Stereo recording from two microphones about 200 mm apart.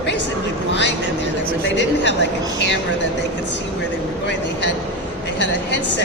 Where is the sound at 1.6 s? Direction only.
60° left (ahead or behind).